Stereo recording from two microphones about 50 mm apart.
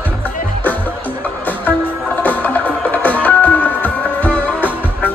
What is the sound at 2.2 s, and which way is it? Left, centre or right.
Music, left.